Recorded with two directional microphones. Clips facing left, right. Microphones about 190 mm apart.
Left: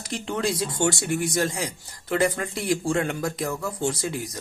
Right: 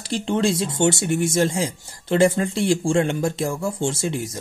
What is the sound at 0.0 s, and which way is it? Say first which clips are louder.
Speech: right 6 dB; 30° right (ahead or behind).